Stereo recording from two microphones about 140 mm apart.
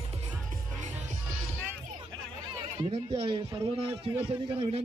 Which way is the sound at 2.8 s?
40° right (ahead or behind).